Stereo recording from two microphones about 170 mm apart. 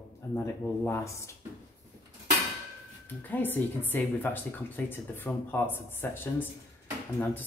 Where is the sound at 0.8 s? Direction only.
15° left (ahead or behind).